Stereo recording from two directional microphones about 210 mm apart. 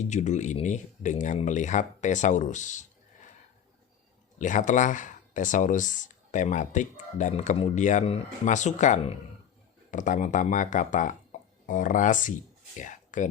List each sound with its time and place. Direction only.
0.1 s speech: 35° left (ahead or behind)
4.4 s speech: 35° left (ahead or behind)